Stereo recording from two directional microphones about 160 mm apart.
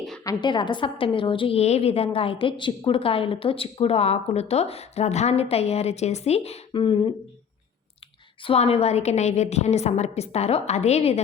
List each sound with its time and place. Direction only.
0.3 s a woman's voice: 30° left (ahead or behind)
8.4 s a woman's voice: 40° left (ahead or behind)